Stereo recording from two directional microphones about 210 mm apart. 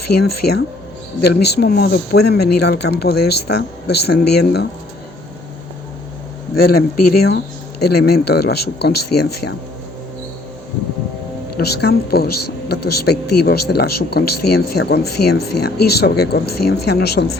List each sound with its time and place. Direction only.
0.1 s speech: 50° left (ahead or behind)
6.6 s speech: 45° left (ahead or behind)
11.5 s speech: 50° left (ahead or behind)